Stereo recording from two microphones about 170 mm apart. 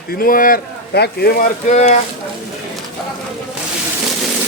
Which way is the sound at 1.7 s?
45° left (ahead or behind).